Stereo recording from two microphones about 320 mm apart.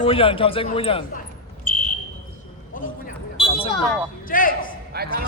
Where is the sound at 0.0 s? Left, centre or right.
Centre.